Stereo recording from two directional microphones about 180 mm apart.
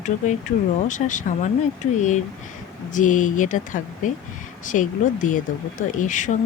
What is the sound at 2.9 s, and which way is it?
Speech, 45° left (ahead or behind).